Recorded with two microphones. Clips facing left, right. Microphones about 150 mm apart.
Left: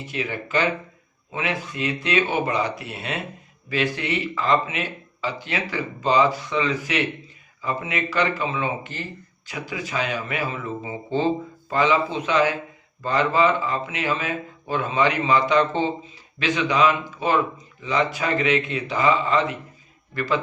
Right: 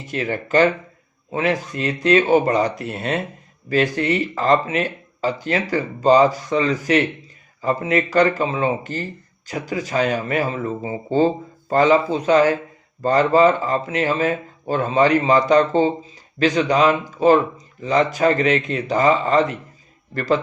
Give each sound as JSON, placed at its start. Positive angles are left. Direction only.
{"t": 0.1, "sound": "a man's voice", "side_deg": -45}